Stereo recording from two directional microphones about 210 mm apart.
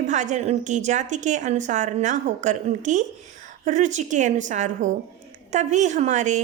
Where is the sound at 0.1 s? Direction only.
35° right (ahead or behind).